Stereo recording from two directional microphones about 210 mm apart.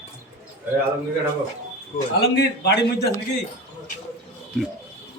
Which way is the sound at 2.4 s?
50° left (ahead or behind).